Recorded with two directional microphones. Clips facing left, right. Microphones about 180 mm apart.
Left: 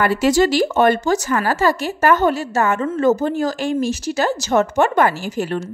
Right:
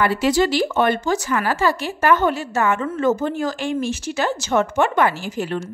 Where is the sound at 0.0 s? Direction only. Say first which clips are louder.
Left 2 dB; 45° left (ahead or behind).